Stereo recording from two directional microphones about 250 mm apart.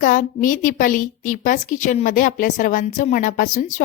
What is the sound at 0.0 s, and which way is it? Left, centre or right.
A woman's voice, left.